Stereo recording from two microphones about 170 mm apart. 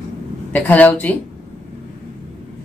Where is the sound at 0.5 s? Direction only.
10° left (ahead or behind).